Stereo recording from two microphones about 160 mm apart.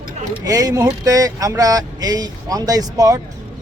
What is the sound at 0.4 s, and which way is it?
A man's voice, 25° right (ahead or behind).